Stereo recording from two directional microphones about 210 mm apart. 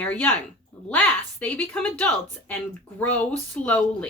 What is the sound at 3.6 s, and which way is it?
Speech, 5° left (ahead or behind).